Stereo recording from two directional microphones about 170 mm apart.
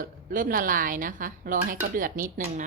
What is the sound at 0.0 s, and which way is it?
Speech, 55° right (ahead or behind).